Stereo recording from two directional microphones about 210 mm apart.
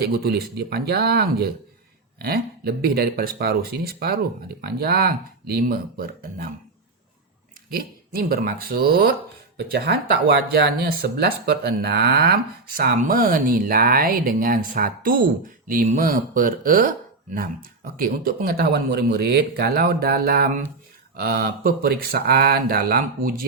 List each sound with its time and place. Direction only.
0.0 s speech: 50° right (ahead or behind)
7.7 s speech: 45° right (ahead or behind)
17.9 s speech: 45° right (ahead or behind)